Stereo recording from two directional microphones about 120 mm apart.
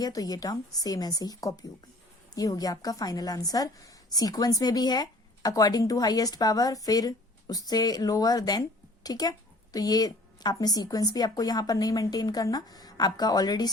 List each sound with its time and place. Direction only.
0.0 s a woman's voice: 30° left (ahead or behind)